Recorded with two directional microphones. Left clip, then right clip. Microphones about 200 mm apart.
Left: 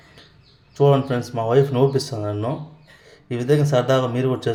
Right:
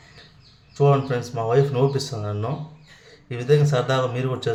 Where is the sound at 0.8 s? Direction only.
15° left (ahead or behind).